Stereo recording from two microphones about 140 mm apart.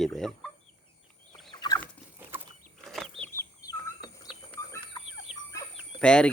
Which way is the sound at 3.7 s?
30° left (ahead or behind).